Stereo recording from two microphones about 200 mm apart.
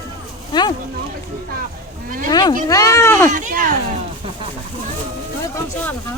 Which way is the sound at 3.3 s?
40° right (ahead or behind).